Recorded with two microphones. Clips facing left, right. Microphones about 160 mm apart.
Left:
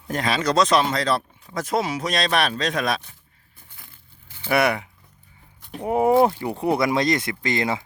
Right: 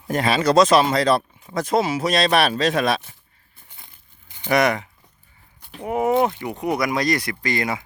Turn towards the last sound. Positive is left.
turn(degrees=25)  # may be behind; listen again after turning